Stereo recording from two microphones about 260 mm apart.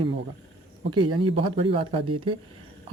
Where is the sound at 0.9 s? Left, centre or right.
Centre.